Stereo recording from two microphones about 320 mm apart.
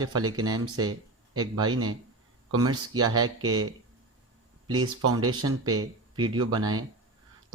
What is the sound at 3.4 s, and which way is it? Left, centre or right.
Speech, right.